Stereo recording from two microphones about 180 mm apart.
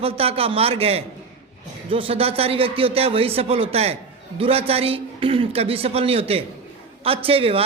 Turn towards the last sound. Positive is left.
turn(degrees=-30)  # may be behind; listen again after turning